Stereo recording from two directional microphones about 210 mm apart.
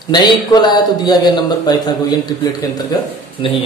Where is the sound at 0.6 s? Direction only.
20° left (ahead or behind).